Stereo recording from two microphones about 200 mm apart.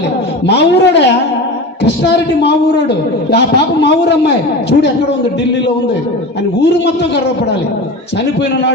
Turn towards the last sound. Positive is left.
turn(degrees=60)  # may be behind; listen again after turning